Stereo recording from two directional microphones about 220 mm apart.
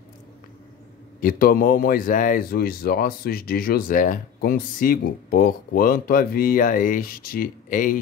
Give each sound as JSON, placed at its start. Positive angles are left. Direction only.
{"t": 1.2, "sound": "speech", "side_deg": 40}